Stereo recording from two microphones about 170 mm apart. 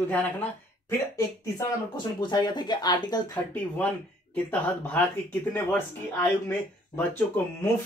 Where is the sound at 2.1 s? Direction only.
25° left (ahead or behind).